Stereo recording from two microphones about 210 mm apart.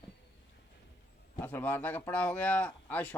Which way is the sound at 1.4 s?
10° left (ahead or behind).